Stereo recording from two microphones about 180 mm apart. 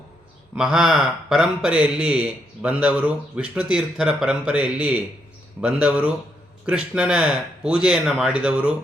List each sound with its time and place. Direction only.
0.5 s a man's voice: 5° right (ahead or behind)